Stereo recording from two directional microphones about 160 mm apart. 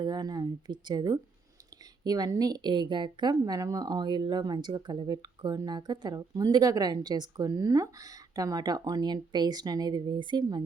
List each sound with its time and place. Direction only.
0.0 s a woman's voice: 25° right (ahead or behind)